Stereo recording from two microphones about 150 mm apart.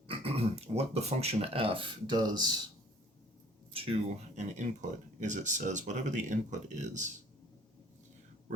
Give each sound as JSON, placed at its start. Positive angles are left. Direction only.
{"t": 0.1, "sound": "speech", "side_deg": -40}
{"t": 3.7, "sound": "a sound", "side_deg": -40}
{"t": 4.4, "sound": "speech", "side_deg": -55}